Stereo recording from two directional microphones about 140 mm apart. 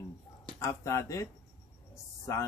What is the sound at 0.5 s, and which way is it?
Speech, 20° left (ahead or behind).